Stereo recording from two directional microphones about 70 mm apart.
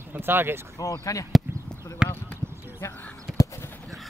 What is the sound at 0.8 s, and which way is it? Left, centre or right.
Speech, left.